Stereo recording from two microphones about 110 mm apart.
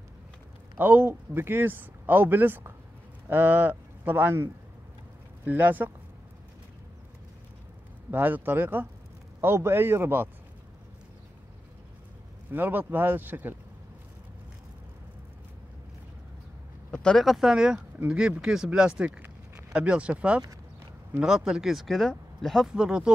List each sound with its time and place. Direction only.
0.7 s speech: 20° right (ahead or behind)
8.1 s speech: 20° right (ahead or behind)
12.4 s speech: 15° right (ahead or behind)
16.9 s speech: 5° left (ahead or behind)